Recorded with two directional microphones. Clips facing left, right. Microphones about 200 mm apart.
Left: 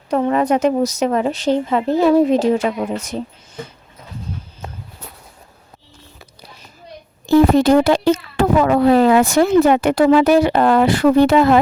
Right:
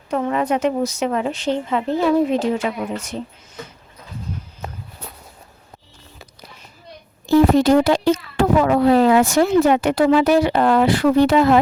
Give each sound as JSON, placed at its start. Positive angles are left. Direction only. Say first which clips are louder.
{"t": 0.1, "sound": "a woman's voice", "louder": "left 4 dB", "side_deg": 40}
{"t": 7.3, "sound": "speech", "louder": "left 2 dB", "side_deg": 55}